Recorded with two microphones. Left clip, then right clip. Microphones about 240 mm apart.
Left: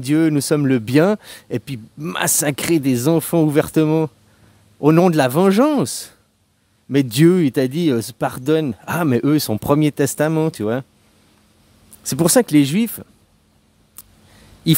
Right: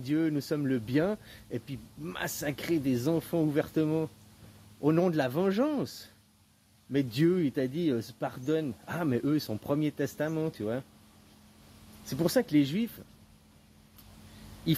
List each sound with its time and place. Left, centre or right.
0.0 s speech: left
12.0 s speech: left